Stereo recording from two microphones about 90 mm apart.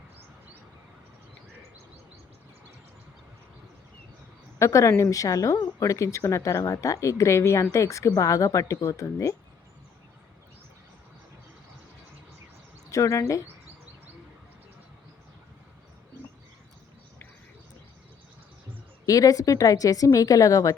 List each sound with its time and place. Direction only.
4.6 s speech: 35° left (ahead or behind)
12.9 s speech: 35° left (ahead or behind)
19.0 s speech: 40° left (ahead or behind)